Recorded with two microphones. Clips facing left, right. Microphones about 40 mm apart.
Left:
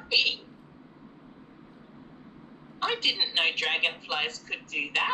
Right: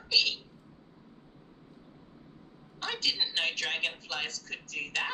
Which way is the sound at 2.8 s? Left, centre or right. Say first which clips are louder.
Left 5 dB; left.